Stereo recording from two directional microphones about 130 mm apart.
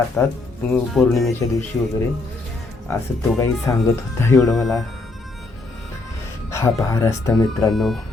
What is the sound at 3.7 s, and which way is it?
Speech, 25° left (ahead or behind).